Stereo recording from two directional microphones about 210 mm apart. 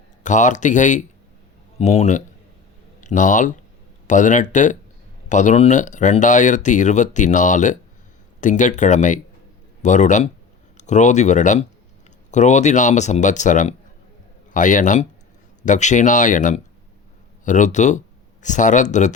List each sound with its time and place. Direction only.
0.2 s speech: 35° left (ahead or behind)